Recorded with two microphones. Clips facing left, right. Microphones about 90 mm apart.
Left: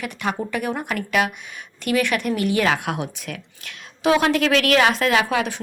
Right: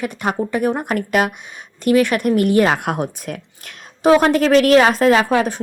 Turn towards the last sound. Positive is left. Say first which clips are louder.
# right 6 dB
turn(degrees=-40)  # may be behind; listen again after turning